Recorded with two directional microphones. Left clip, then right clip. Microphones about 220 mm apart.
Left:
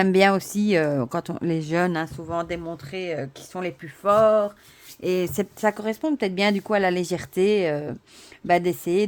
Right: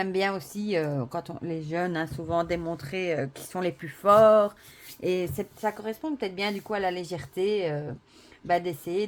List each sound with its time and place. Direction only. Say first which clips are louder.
0.0 s speech: left 9 dB; 45° left (ahead or behind)
2.1 s speech: even; 5° left (ahead or behind)
5.0 s speech: left 3 dB; 10° left (ahead or behind)
5.5 s speech: left 7 dB; 50° left (ahead or behind)